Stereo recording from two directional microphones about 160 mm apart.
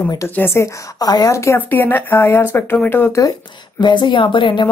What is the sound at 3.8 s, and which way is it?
Speech, 30° left (ahead or behind).